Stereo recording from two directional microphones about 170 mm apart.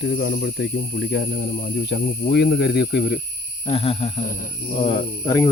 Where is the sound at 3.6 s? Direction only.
35° left (ahead or behind).